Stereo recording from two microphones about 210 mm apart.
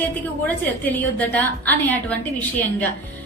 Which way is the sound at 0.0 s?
10° left (ahead or behind).